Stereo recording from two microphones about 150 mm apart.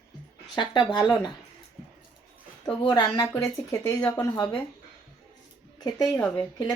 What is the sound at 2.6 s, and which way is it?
Speech, 30° left (ahead or behind).